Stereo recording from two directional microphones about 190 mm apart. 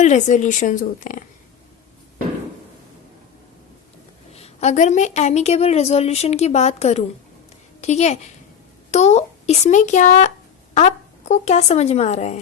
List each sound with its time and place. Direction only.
0.0 s a woman's voice: 40° left (ahead or behind)
4.4 s a woman's voice: 35° left (ahead or behind)